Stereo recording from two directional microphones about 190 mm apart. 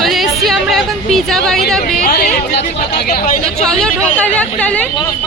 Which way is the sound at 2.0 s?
55° left (ahead or behind).